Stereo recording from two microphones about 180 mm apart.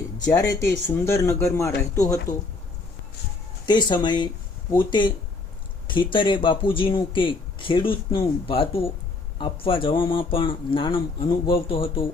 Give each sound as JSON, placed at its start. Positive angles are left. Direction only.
{"t": 0.3, "sound": "speech", "side_deg": 20}
{"t": 3.7, "sound": "speech", "side_deg": 25}